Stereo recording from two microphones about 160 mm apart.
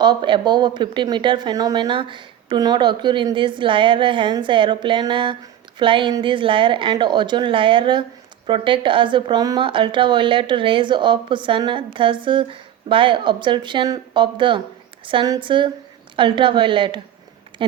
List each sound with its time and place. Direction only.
0.0 s a woman's voice: 30° right (ahead or behind)